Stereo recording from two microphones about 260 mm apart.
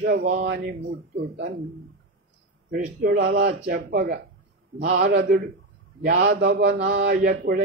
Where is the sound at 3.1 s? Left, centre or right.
Right.